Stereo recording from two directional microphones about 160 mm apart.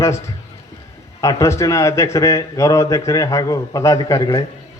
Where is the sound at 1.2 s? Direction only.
20° left (ahead or behind).